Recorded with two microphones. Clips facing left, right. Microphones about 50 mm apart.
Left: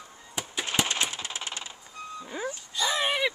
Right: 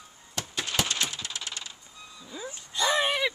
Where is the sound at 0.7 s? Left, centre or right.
Left.